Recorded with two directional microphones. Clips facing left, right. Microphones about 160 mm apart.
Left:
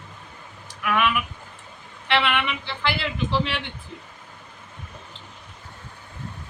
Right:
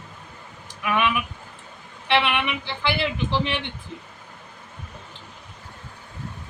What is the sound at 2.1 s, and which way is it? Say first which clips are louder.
Speech: right 1 dB; 20° right (ahead or behind).